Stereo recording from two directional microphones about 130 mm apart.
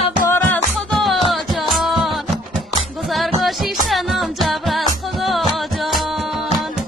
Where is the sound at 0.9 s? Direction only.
Centre (ahead or behind).